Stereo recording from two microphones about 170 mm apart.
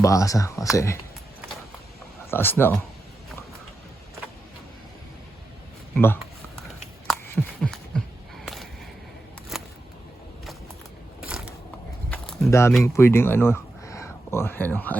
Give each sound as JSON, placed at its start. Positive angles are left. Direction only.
{"t": 0.0, "sound": "speech", "side_deg": 20}
{"t": 2.3, "sound": "speech", "side_deg": 15}
{"t": 7.3, "sound": "heart murmur", "side_deg": 10}
{"t": 9.5, "sound": "a sound", "side_deg": 0}
{"t": 11.3, "sound": "a sound", "side_deg": -5}
{"t": 12.5, "sound": "speech", "side_deg": 15}